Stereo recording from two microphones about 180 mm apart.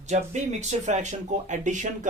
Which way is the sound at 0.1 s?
40° right (ahead or behind).